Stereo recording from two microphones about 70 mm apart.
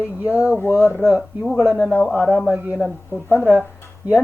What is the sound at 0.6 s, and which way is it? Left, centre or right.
Speech, left.